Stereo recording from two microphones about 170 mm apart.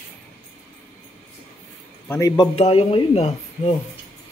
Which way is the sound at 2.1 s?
20° left (ahead or behind).